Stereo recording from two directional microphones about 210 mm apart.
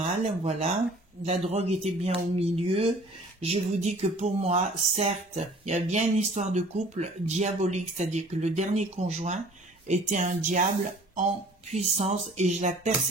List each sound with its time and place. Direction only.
0.0 s speech: 30° right (ahead or behind)